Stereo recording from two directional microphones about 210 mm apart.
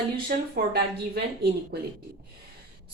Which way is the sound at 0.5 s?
50° right (ahead or behind).